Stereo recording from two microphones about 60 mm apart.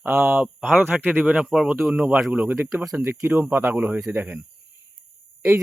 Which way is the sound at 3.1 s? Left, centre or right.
Right.